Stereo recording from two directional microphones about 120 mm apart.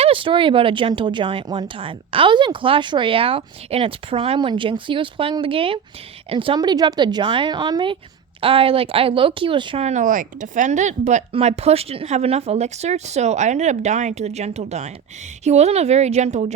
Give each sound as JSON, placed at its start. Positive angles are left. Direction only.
{"t": 0.0, "sound": "speech", "side_deg": -50}
{"t": 6.6, "sound": "speech", "side_deg": -35}
{"t": 8.4, "sound": "speech", "side_deg": -50}
{"t": 9.8, "sound": "speech", "side_deg": -80}
{"t": 11.3, "sound": "speech", "side_deg": -55}